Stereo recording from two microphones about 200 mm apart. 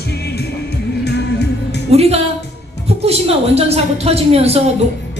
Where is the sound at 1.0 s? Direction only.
55° left (ahead or behind).